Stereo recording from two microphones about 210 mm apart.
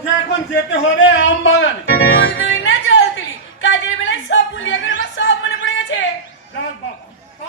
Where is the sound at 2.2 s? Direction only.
60° left (ahead or behind).